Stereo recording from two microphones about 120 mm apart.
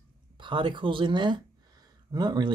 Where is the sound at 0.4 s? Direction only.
40° right (ahead or behind).